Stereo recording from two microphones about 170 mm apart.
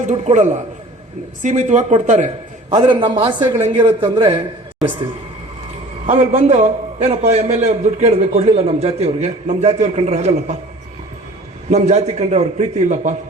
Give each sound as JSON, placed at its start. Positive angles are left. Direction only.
{"t": 0.0, "sound": "speech", "side_deg": -45}
{"t": 2.7, "sound": "a man's voice", "side_deg": -30}
{"t": 6.1, "sound": "a man's voice", "side_deg": -40}
{"t": 11.7, "sound": "a man's voice", "side_deg": -40}